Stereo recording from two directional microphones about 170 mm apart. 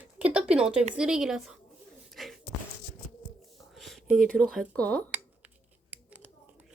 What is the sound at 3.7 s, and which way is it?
Speech, centre (ahead or behind).